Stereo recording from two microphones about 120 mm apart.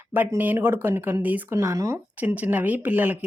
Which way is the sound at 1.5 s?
25° right (ahead or behind).